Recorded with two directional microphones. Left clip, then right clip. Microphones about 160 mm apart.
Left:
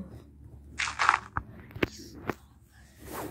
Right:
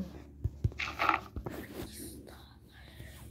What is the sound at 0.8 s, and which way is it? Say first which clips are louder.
Biting: left 5 dB; 55° left (ahead or behind).